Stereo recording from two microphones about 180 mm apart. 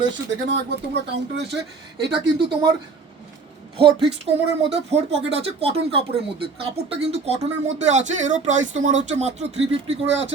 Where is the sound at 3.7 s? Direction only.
30° right (ahead or behind).